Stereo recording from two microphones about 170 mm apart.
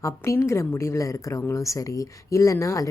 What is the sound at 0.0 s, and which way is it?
Speech, 15° left (ahead or behind).